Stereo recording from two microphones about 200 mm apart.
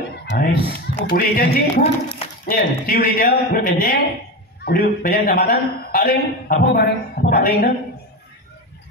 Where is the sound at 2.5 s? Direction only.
45° left (ahead or behind).